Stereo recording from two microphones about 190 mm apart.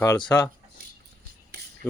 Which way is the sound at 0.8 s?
45° right (ahead or behind).